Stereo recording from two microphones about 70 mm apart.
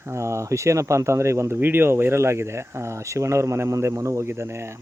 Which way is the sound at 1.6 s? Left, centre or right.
Right.